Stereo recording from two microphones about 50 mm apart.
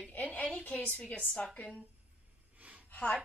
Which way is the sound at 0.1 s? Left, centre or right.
Left.